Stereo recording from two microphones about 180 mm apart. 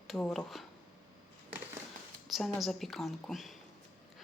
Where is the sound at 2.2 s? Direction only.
Centre (ahead or behind).